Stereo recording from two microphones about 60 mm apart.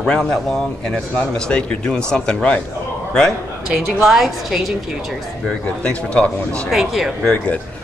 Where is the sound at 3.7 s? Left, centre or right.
Centre.